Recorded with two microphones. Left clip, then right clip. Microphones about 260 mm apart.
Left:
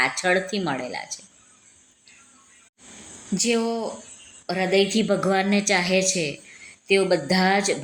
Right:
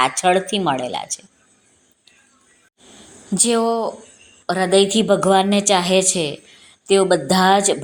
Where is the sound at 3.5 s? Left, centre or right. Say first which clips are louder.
Right 7 dB; centre.